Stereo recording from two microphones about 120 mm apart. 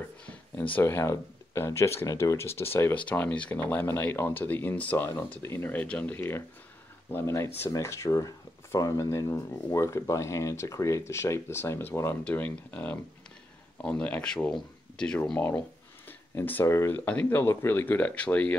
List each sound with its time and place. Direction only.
0.7 s speech: 20° left (ahead or behind)